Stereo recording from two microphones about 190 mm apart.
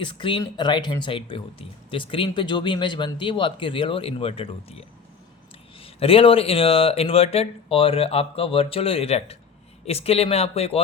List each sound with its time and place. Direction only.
0.0 s speech: 25° left (ahead or behind)
5.8 s speech: 30° left (ahead or behind)